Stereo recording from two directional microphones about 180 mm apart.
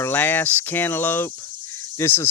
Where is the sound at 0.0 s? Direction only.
10° left (ahead or behind).